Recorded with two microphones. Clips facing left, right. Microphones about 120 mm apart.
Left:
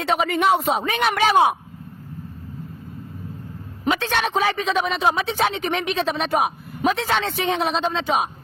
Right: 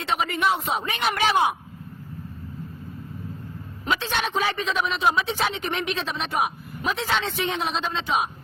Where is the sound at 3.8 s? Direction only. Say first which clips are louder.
Left 4 dB; 55° left (ahead or behind); by 5.7 s 70° left (ahead or behind).